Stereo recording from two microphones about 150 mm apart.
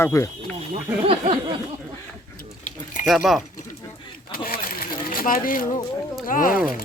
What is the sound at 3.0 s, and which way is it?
Speech, 5° right (ahead or behind).